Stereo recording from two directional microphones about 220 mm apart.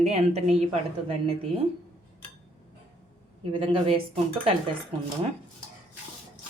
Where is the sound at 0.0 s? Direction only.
30° right (ahead or behind).